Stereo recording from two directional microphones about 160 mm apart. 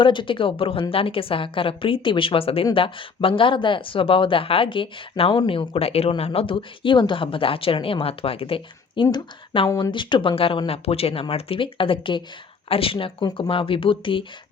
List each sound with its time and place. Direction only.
0.0 s speech: 30° left (ahead or behind)